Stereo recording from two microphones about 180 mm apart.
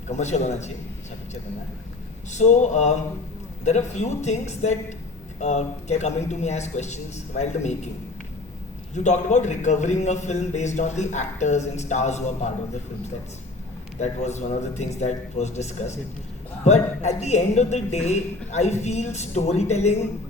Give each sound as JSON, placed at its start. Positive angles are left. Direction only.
{"t": 0.1, "sound": "a man's voice", "side_deg": 40}
{"t": 2.3, "sound": "a man's voice", "side_deg": 40}
{"t": 9.0, "sound": "a man's voice", "side_deg": 40}
{"t": 14.0, "sound": "a man's voice", "side_deg": 40}